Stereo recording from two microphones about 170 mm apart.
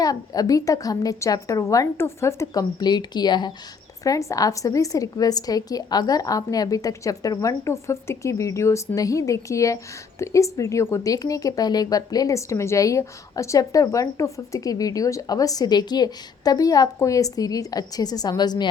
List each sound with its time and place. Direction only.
0.0 s speech: 20° left (ahead or behind)